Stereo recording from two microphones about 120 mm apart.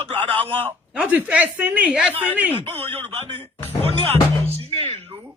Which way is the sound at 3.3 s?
55° right (ahead or behind).